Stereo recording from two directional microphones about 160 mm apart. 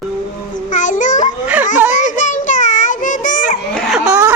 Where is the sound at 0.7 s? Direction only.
50° left (ahead or behind).